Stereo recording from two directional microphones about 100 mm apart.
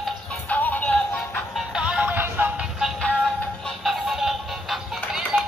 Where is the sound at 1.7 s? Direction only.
5° right (ahead or behind).